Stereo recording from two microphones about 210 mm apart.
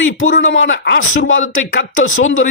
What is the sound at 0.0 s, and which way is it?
Speech, 65° left (ahead or behind).